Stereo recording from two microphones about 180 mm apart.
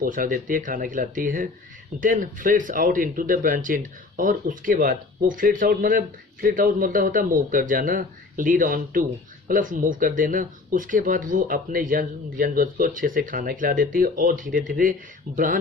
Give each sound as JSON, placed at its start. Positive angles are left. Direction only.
{"t": 0.0, "sound": "speech", "side_deg": -50}